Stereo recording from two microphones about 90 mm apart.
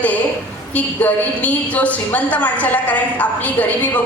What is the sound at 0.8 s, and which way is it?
A woman's voice, 15° left (ahead or behind).